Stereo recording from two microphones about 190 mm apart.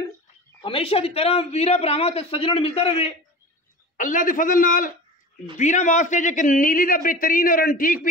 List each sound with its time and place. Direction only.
0.6 s a man's voice: 30° left (ahead or behind)
3.9 s a man's voice: 45° left (ahead or behind)